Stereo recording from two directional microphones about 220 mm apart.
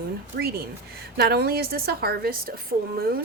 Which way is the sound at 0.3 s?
45° right (ahead or behind).